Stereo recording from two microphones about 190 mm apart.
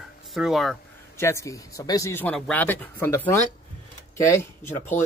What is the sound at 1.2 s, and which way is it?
Speech, 15° left (ahead or behind).